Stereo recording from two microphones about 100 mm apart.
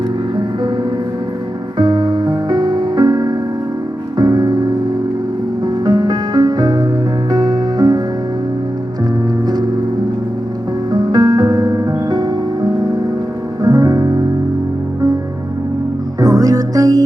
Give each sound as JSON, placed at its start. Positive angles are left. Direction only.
{"t": 1.8, "sound": "music", "side_deg": -45}
{"t": 10.9, "sound": "music", "side_deg": -40}
{"t": 16.2, "sound": "music", "side_deg": -35}